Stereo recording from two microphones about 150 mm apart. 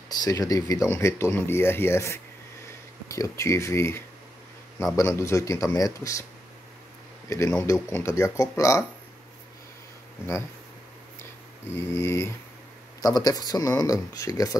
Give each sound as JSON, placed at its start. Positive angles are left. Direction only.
{"t": 0.1, "sound": "speech", "side_deg": 25}
{"t": 7.2, "sound": "speech", "side_deg": 20}
{"t": 11.9, "sound": "speech", "side_deg": 15}